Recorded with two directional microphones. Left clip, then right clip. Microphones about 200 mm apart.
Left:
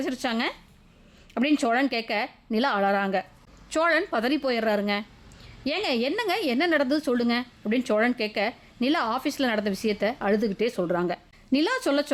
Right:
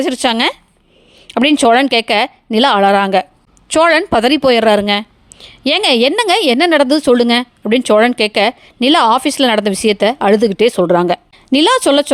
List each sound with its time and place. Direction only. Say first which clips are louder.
0.0 s speech: right 14 dB; 35° right (ahead or behind)